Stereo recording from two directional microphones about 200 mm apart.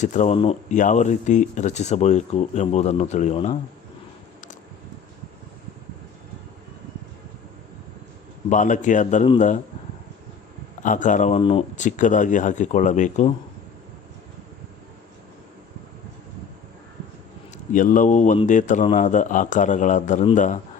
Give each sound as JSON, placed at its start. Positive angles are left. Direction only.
{"t": 0.0, "sound": "speech", "side_deg": 35}
{"t": 8.4, "sound": "speech", "side_deg": 40}
{"t": 10.8, "sound": "speech", "side_deg": 40}
{"t": 17.7, "sound": "speech", "side_deg": 40}